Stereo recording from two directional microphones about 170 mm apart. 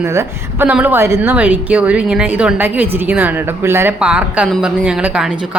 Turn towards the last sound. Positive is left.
turn(degrees=-5)  # may be behind; listen again after turning